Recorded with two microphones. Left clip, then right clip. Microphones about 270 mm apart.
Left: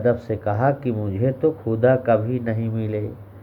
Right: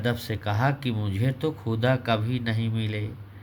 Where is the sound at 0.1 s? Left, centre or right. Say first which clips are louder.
Left 8 dB; right.